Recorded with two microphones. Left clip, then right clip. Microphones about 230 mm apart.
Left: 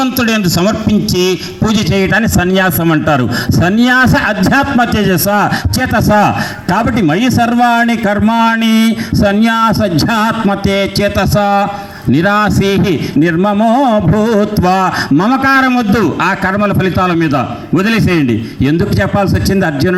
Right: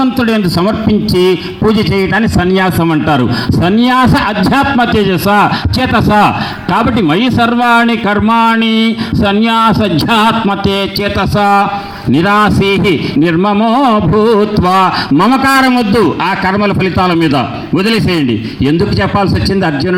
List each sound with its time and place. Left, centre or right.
0.2 s a man's voice: left
0.6 s a man's voice: left
1.3 s a man's voice: left
2.4 s a man's voice: left
2.6 s a man's voice: left
19.5 s a man's voice: left